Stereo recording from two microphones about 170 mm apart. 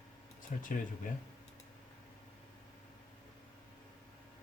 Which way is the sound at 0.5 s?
50° left (ahead or behind).